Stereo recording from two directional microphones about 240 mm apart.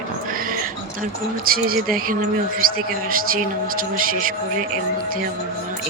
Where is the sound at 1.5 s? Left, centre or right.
Right.